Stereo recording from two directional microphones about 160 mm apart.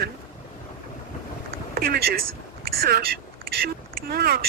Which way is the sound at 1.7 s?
80° right.